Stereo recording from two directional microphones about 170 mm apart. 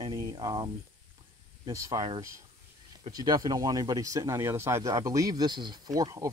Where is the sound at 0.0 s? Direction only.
25° right (ahead or behind).